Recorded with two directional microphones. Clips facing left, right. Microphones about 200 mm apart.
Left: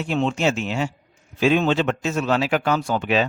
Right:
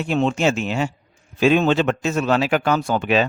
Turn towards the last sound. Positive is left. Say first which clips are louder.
# right 2 dB
turn(degrees=-50)  # may be behind; listen again after turning